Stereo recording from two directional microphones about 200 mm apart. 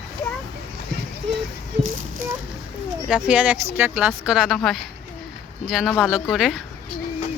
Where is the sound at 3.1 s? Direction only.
5° right (ahead or behind).